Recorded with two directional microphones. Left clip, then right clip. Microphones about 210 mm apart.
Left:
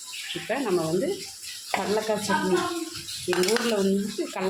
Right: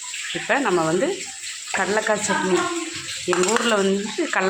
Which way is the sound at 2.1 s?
30° right (ahead or behind).